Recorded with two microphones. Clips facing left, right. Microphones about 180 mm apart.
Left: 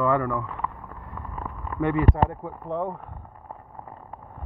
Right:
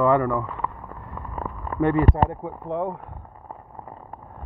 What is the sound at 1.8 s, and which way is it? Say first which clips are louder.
Speech: right 2 dB; 30° right (ahead or behind).